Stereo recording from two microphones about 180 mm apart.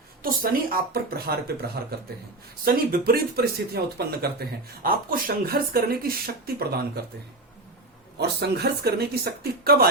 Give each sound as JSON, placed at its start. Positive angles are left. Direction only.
{"t": 0.2, "sound": "a woman's voice", "side_deg": -55}
{"t": 8.2, "sound": "speech", "side_deg": -65}